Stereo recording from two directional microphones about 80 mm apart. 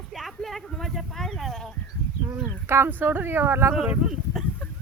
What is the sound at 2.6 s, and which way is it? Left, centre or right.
Speech, right.